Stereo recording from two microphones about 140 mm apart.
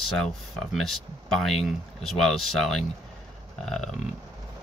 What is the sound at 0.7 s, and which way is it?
Speech, centre (ahead or behind).